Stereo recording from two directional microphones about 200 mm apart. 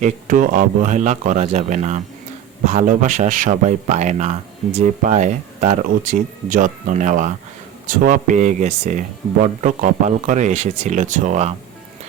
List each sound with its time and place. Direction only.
0.0 s speech: 40° right (ahead or behind)